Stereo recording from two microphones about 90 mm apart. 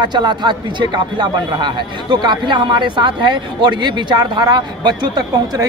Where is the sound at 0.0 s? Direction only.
55° right (ahead or behind).